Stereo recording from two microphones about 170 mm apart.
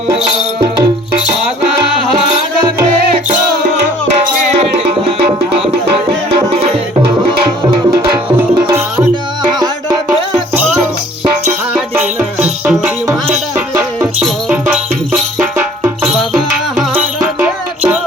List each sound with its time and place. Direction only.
4.2 s music: 55° right (ahead or behind)
11.7 s music: 10° right (ahead or behind)
14.2 s music: 5° right (ahead or behind)
17.0 s music: 10° right (ahead or behind)